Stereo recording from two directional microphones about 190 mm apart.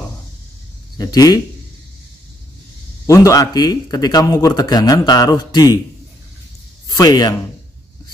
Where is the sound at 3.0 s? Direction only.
15° left (ahead or behind).